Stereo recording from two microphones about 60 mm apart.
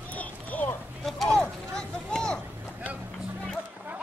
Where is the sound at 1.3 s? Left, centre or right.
Centre.